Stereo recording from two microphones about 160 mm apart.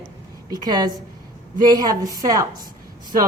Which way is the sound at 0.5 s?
25° right (ahead or behind).